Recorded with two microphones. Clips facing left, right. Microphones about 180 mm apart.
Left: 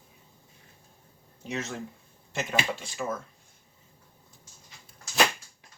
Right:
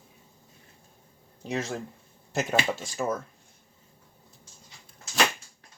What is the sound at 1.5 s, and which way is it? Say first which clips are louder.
Speech: right 3 dB; 35° right (ahead or behind).